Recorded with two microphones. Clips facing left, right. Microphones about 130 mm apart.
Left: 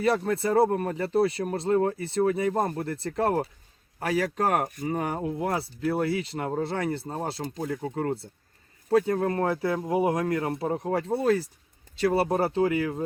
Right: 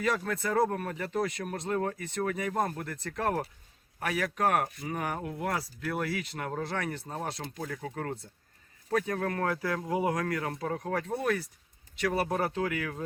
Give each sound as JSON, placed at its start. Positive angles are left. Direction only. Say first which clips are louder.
{"t": 0.0, "sound": "speech", "louder": "left 6 dB", "side_deg": 30}